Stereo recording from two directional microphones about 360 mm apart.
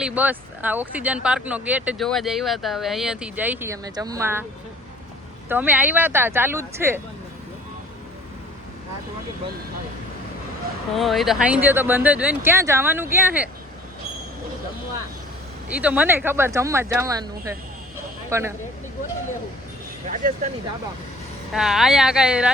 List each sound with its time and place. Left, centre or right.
0.0 s speech: centre
5.5 s speech: centre
10.9 s speech: centre
15.7 s speech: centre
20.1 s speech: right
21.5 s speech: centre